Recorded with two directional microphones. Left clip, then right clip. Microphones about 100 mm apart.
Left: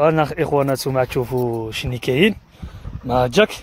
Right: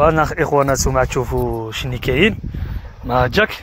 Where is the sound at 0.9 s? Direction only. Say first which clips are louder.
Right 2 dB; 30° left (ahead or behind).